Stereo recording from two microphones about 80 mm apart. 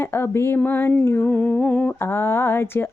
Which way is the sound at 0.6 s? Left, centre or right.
Left.